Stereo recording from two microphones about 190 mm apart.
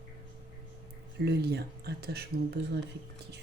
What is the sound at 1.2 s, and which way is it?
Speech, 55° right (ahead or behind).